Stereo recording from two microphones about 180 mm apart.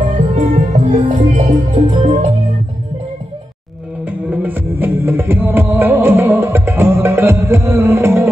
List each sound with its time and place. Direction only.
0.0 s music: 40° right (ahead or behind)
4.0 s music: 10° right (ahead or behind)